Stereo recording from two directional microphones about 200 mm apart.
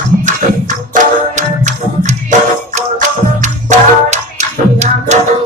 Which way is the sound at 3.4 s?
35° right (ahead or behind).